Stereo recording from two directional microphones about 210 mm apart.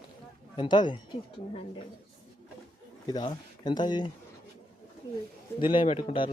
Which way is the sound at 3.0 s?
20° left (ahead or behind).